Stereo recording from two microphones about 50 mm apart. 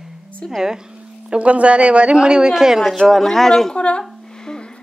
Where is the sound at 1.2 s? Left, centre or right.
Right.